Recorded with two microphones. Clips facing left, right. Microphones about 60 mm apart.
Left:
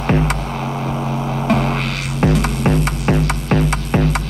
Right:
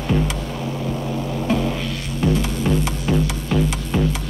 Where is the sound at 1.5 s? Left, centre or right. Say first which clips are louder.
Left 4 dB; left.